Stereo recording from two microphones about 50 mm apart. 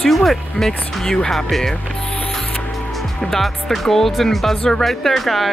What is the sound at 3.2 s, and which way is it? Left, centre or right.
Speech, centre.